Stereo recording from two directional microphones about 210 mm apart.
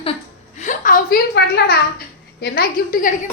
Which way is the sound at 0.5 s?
35° left (ahead or behind).